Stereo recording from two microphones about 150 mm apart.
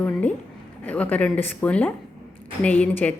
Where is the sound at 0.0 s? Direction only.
10° left (ahead or behind).